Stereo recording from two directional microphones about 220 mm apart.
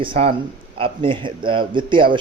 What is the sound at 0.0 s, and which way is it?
Speech, 25° right (ahead or behind).